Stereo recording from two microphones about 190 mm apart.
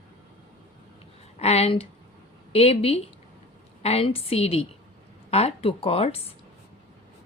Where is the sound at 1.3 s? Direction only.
35° left (ahead or behind).